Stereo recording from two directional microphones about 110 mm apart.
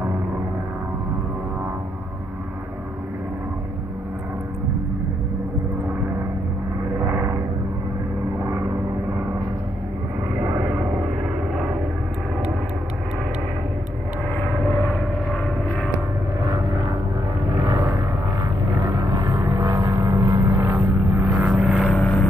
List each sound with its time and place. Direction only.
7.0 s vehicle: 20° right (ahead or behind)
8.5 s vehicle: 25° right (ahead or behind)
16.5 s vehicle: 30° right (ahead or behind)
17.6 s a sound: 25° right (ahead or behind)
18.9 s vehicle: 30° right (ahead or behind)
21.1 s vehicle: 10° right (ahead or behind)
21.8 s vehicle: 15° left (ahead or behind)